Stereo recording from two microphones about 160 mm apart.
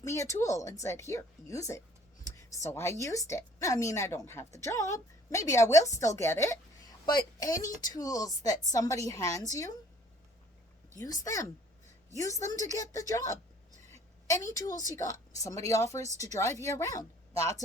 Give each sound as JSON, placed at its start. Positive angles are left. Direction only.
{"t": 0.0, "sound": "a woman's voice", "side_deg": 20}
{"t": 10.9, "sound": "a woman's voice", "side_deg": 20}
{"t": 13.9, "sound": "a sound", "side_deg": 20}
{"t": 15.0, "sound": "a woman's voice", "side_deg": 20}